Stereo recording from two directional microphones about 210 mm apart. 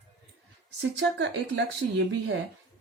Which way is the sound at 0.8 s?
60° right (ahead or behind).